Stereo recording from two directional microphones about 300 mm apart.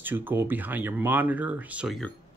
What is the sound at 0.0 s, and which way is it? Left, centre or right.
Speech, centre.